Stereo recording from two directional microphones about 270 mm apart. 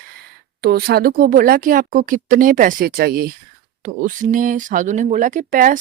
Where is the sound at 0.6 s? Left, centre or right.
Right.